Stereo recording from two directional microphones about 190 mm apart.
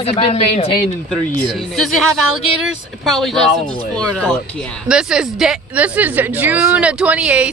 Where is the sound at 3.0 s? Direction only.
Centre (ahead or behind).